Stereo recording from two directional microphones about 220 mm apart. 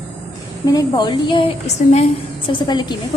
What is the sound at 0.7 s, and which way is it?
A woman's voice, 15° left (ahead or behind).